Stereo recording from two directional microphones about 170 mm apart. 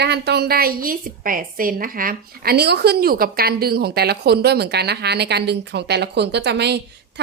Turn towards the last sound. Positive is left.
turn(degrees=-80)